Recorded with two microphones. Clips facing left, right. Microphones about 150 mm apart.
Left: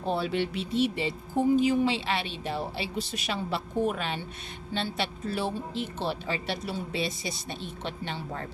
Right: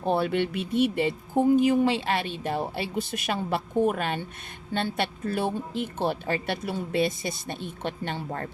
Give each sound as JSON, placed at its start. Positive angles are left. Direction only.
{"t": 0.0, "sound": "speech", "side_deg": -55}